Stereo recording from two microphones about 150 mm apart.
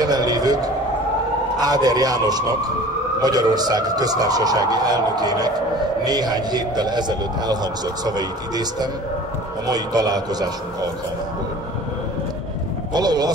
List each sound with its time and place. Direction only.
0.0 s a sound: 25° right (ahead or behind)
1.6 s a man's voice: 25° right (ahead or behind)
12.9 s a man's voice: 25° right (ahead or behind)